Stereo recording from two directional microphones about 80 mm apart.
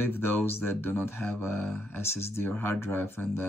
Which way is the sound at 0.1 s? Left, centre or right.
Left.